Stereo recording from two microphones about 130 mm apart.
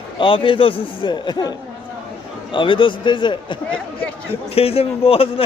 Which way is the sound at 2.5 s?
40° left (ahead or behind).